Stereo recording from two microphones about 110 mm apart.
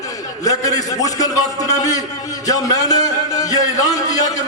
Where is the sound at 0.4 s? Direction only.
35° left (ahead or behind).